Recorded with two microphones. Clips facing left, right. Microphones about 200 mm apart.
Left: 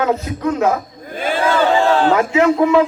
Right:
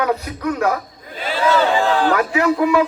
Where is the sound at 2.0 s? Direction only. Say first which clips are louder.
Left 3 dB; 25° left (ahead or behind).